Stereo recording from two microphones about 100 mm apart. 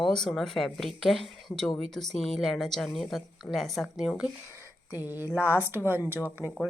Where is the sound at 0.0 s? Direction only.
5° left (ahead or behind).